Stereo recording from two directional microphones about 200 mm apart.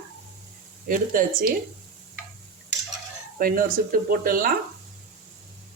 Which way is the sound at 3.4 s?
45° right (ahead or behind).